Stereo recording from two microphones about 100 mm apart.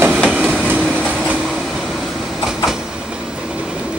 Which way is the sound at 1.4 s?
Centre (ahead or behind).